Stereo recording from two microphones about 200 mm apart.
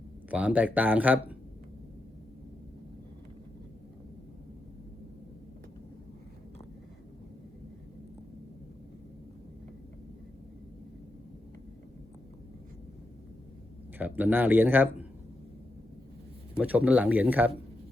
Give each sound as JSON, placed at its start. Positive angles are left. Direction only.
{"t": 0.3, "sound": "speech", "side_deg": -5}
{"t": 14.0, "sound": "speech", "side_deg": -10}
{"t": 16.6, "sound": "speech", "side_deg": -10}